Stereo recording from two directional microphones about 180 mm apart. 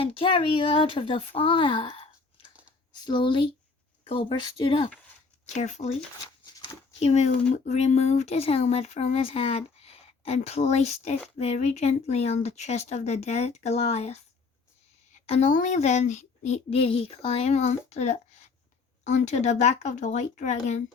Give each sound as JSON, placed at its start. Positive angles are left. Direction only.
{"t": 0.0, "sound": "speech", "side_deg": 30}
{"t": 5.5, "sound": "speech", "side_deg": 40}
{"t": 7.0, "sound": "speech", "side_deg": 40}